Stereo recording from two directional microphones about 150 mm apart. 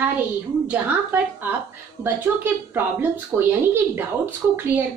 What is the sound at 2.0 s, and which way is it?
A woman's voice, 15° right (ahead or behind).